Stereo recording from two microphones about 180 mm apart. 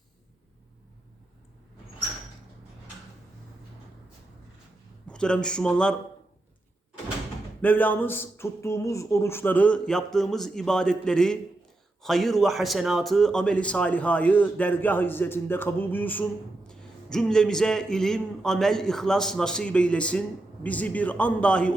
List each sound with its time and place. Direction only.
5.0 s speech: 5° left (ahead or behind)
7.6 s a man's voice: 10° left (ahead or behind)